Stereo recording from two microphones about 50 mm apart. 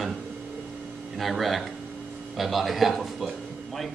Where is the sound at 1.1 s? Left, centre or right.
Centre.